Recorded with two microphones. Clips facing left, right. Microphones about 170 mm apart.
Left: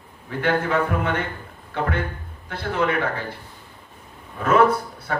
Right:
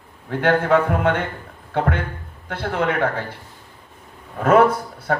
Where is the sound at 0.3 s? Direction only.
60° right (ahead or behind).